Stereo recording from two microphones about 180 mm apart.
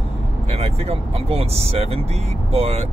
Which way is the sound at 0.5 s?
35° right (ahead or behind).